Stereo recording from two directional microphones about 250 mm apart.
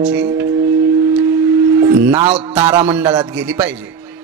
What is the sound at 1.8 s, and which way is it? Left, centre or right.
Speech, centre.